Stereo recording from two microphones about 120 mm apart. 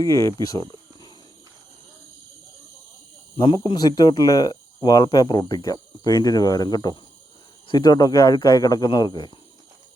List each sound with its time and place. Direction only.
0.0 s speech: 25° left (ahead or behind)
0.5 s cricket: 35° left (ahead or behind)
3.3 s speech: 40° left (ahead or behind)